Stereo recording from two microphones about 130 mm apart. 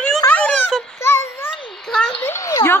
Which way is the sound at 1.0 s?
20° left (ahead or behind).